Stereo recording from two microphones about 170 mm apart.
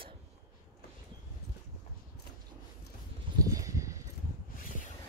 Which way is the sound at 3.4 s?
20° right (ahead or behind).